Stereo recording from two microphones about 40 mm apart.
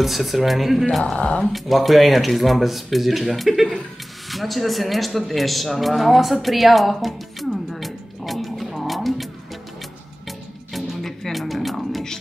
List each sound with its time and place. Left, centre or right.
0.0 s speech: centre
1.1 s speech: left
1.5 s speech: centre
6.4 s music: centre